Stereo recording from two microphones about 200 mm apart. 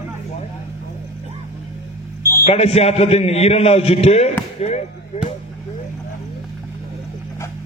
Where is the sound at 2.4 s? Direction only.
30° left (ahead or behind).